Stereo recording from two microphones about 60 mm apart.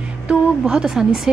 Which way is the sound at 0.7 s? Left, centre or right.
Centre.